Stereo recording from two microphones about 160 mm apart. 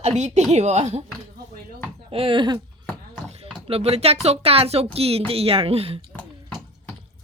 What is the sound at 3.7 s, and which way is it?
Speech, 40° right (ahead or behind).